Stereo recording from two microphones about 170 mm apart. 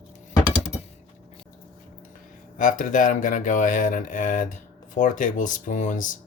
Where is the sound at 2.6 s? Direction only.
50° left (ahead or behind).